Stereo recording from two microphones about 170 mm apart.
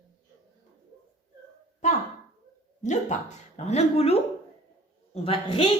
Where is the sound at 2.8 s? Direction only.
45° left (ahead or behind).